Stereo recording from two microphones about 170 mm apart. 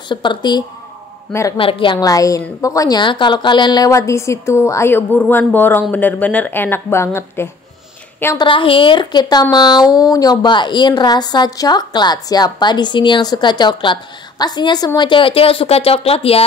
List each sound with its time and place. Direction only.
0.1 s a woman's voice: 30° left (ahead or behind)
8.4 s speech: 30° left (ahead or behind)